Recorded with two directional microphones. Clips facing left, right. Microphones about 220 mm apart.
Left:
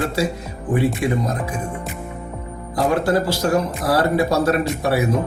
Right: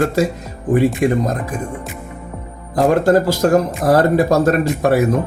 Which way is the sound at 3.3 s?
45° right (ahead or behind).